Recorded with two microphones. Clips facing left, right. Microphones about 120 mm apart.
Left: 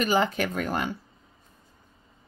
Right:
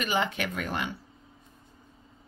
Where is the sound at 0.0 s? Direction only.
40° left (ahead or behind).